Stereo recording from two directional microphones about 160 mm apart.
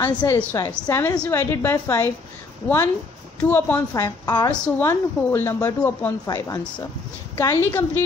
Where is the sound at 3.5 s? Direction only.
15° left (ahead or behind).